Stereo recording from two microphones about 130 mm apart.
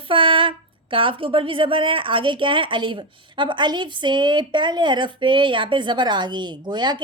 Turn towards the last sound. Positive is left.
turn(degrees=-35)  # may be behind; listen again after turning